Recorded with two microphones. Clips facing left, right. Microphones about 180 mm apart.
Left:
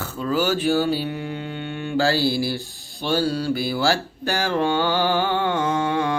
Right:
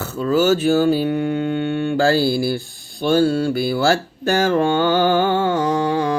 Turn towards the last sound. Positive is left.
turn(degrees=-35)  # may be behind; listen again after turning